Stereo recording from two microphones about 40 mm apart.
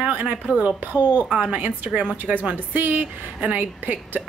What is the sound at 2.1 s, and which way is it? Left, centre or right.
Speech, right.